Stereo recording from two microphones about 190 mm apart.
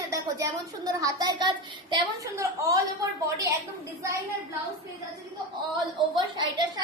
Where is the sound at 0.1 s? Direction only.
15° right (ahead or behind).